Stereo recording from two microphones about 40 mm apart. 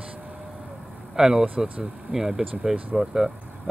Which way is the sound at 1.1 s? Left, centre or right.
Centre.